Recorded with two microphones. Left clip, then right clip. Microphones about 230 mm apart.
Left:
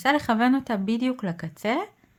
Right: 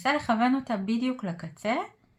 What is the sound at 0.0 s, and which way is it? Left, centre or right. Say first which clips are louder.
Speech: left 3 dB; left.